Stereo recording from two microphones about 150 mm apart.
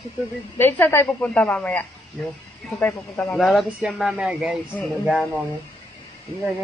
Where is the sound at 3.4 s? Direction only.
Centre (ahead or behind).